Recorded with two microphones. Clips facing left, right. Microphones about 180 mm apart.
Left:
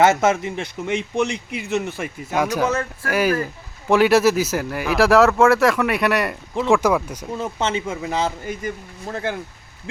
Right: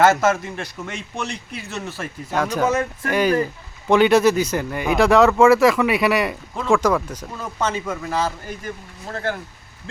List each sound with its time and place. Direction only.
0.0 s a man's voice: 20° left (ahead or behind)
2.6 s speech: 15° right (ahead or behind)
3.1 s a man's voice: 5° left (ahead or behind)
7.3 s speech: 25° left (ahead or behind)
9.9 s quack: 15° left (ahead or behind)